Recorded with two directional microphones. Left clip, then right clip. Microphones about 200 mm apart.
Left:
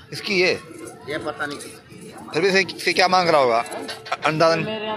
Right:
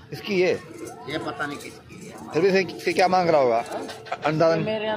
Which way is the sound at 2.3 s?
20° right (ahead or behind).